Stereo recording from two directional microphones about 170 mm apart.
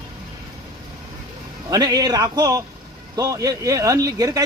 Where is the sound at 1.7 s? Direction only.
20° right (ahead or behind).